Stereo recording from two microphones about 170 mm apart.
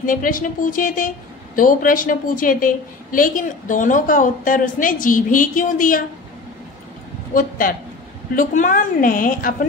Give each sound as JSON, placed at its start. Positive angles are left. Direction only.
{"t": 0.0, "sound": "a woman's voice", "side_deg": 55}
{"t": 7.3, "sound": "a woman's voice", "side_deg": 55}